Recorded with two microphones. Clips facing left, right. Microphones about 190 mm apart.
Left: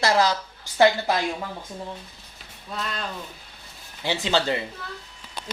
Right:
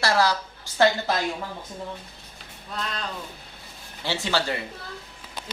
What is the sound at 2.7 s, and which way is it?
Speech, centre (ahead or behind).